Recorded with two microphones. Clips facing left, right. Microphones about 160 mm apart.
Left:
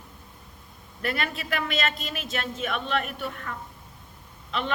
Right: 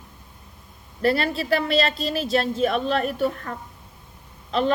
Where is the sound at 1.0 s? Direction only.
35° right (ahead or behind).